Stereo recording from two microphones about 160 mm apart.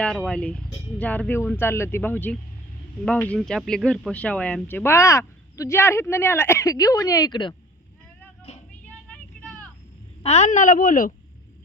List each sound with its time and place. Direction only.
0.0 s speech: 5° left (ahead or behind); by 7.5 s 30° left (ahead or behind)
9.0 s vehicle: 10° left (ahead or behind)
10.2 s a woman's voice: 45° left (ahead or behind)